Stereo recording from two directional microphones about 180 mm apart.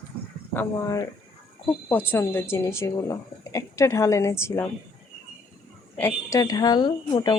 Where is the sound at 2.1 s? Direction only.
10° left (ahead or behind).